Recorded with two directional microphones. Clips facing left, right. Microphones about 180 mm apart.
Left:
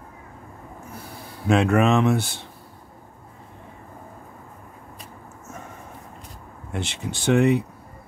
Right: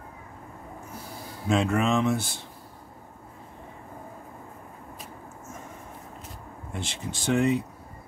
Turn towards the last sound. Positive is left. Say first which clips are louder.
# left 5 dB
turn(degrees=65)  # may be behind; listen again after turning